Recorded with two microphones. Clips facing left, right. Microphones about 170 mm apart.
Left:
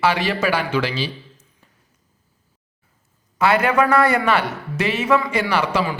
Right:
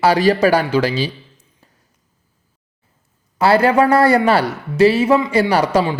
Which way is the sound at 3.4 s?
35° right (ahead or behind).